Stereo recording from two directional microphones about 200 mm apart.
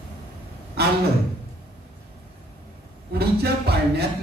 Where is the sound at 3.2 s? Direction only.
55° right (ahead or behind).